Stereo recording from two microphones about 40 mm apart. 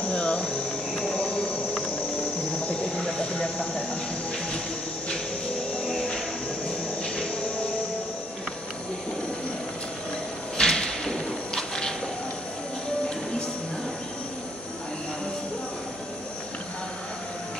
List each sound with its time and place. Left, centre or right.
0.1 s insect: left
1.1 s cricket: left
2.6 s train: left
7.0 s music: left
10.6 s thump: left